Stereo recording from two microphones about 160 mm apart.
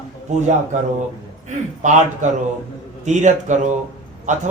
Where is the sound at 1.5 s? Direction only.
50° right (ahead or behind).